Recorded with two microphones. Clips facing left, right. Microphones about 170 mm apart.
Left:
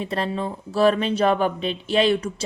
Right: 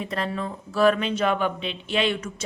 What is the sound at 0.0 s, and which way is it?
A woman's voice, 30° left (ahead or behind).